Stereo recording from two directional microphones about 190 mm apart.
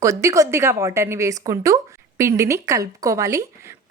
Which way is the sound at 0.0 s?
15° right (ahead or behind).